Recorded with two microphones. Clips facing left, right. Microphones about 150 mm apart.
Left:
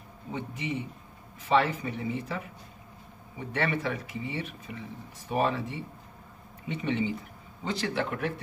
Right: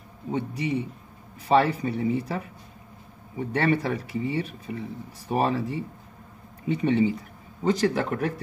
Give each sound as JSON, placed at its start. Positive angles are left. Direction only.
{"t": 0.3, "sound": "speech", "side_deg": -35}
{"t": 3.5, "sound": "speech", "side_deg": -40}